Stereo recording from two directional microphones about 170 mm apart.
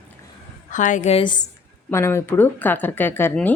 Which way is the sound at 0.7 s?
50° left (ahead or behind).